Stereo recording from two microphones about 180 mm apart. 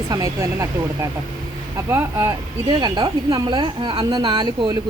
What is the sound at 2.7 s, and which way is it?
A woman's voice, 25° right (ahead or behind).